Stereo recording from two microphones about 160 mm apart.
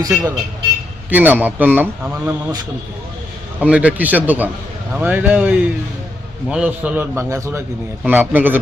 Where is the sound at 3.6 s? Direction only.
10° right (ahead or behind).